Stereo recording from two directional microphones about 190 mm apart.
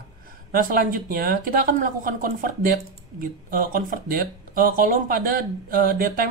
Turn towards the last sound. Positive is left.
turn(degrees=-50)  # may be behind; listen again after turning